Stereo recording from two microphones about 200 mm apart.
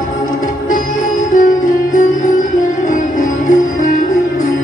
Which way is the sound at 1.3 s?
40° left (ahead or behind).